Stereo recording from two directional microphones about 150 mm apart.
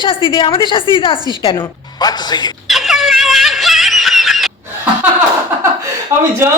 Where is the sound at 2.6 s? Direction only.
Centre (ahead or behind).